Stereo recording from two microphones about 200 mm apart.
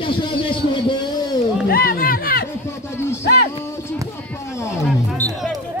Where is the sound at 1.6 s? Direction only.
45° left (ahead or behind).